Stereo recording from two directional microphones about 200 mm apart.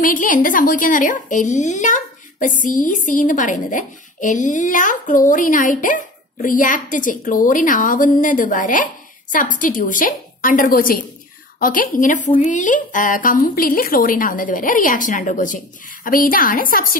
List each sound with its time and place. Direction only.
0.0 s a woman's voice: 40° left (ahead or behind)